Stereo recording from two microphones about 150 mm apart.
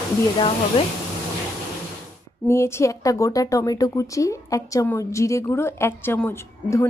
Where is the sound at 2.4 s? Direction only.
15° left (ahead or behind).